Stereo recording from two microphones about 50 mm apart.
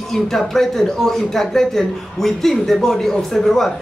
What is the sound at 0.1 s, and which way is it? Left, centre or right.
Speech, centre.